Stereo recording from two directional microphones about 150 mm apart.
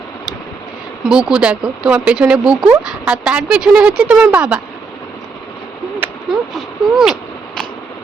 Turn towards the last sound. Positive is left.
turn(degrees=0)  # may be behind; listen again after turning